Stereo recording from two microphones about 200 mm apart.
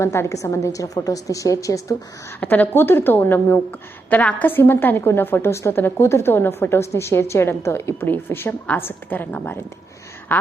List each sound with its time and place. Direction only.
0.0 s a woman's voice: 15° left (ahead or behind)